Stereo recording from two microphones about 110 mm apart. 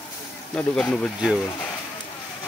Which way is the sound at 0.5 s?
10° left (ahead or behind).